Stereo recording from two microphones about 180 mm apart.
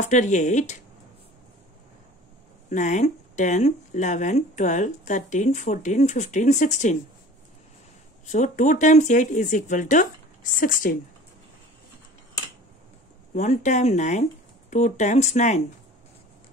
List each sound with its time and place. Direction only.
0.0 s speech: 40° left (ahead or behind)
2.7 s speech: 45° left (ahead or behind)
8.3 s speech: 45° left (ahead or behind)
13.3 s speech: 40° left (ahead or behind)